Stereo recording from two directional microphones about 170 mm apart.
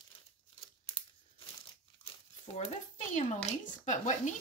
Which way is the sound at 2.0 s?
35° left (ahead or behind).